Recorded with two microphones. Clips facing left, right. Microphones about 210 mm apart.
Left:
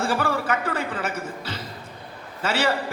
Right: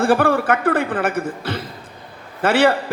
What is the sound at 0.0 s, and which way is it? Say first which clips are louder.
A man's voice: right 8 dB; 55° right (ahead or behind).